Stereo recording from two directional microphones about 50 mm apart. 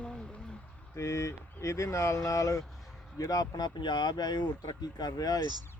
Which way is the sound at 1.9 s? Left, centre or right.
Left.